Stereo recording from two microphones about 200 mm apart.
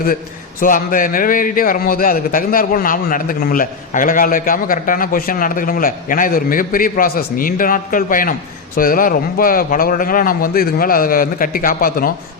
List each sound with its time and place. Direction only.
0.6 s a man's voice: 45° left (ahead or behind)